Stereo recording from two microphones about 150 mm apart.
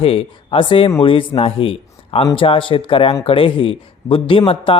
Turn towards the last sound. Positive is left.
turn(degrees=35)  # may be behind; listen again after turning